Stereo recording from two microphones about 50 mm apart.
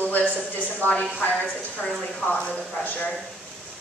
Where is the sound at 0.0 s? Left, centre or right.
Left.